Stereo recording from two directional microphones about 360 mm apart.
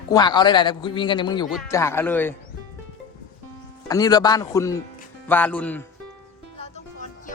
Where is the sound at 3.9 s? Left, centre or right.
Centre.